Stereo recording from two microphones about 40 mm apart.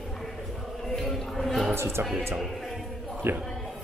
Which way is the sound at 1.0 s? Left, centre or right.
Centre.